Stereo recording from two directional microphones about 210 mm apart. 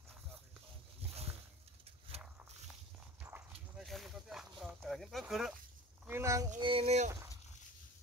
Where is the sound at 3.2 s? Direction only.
10° right (ahead or behind).